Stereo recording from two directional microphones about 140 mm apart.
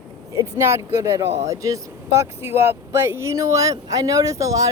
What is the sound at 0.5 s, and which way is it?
Speech, 20° right (ahead or behind).